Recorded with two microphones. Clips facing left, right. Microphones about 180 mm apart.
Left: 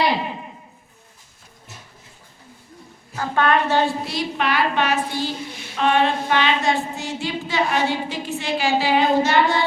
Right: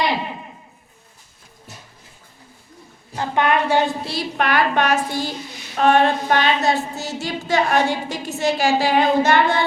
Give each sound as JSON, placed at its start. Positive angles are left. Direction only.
{"t": 3.3, "sound": "a woman's voice", "side_deg": -15}
{"t": 4.0, "sound": "a woman's voice", "side_deg": -35}
{"t": 4.4, "sound": "a sound", "side_deg": -50}